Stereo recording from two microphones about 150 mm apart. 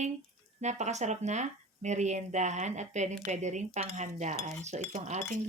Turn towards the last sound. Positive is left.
turn(degrees=-50)  # may be behind; listen again after turning